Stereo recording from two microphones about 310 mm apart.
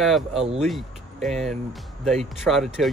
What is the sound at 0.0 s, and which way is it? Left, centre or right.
Speech, centre.